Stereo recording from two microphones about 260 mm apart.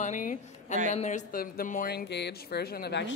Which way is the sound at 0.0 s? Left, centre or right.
Left.